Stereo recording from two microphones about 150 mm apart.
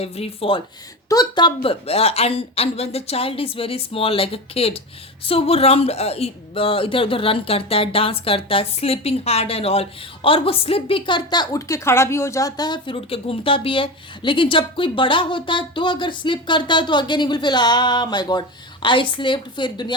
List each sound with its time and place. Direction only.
0.0 s a woman's voice: 40° left (ahead or behind)
1.1 s a woman's voice: 25° left (ahead or behind)